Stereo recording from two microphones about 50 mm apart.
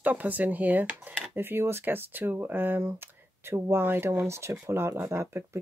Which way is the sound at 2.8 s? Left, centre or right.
Right.